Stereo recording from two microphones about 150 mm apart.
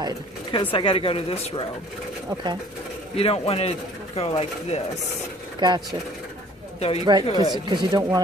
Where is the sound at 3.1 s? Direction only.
40° left (ahead or behind).